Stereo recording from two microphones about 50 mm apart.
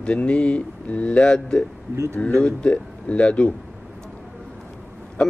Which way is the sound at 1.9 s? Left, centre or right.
Right.